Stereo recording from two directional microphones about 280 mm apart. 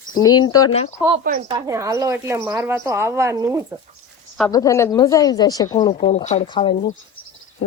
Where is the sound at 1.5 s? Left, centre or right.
Centre.